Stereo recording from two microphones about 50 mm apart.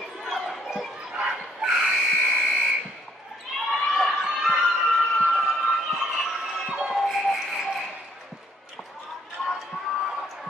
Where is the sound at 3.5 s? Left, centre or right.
Centre.